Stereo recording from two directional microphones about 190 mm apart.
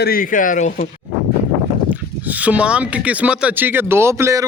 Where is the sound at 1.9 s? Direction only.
10° right (ahead or behind).